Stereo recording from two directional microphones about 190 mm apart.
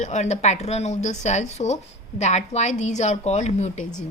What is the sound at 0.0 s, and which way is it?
A woman's voice, 40° left (ahead or behind).